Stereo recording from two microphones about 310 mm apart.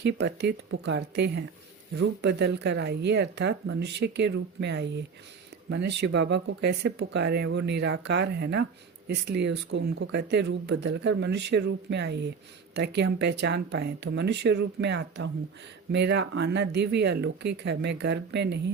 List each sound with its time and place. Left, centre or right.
0.0 s speech: right